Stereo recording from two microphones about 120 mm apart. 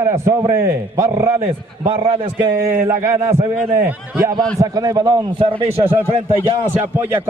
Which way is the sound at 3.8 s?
15° right (ahead or behind).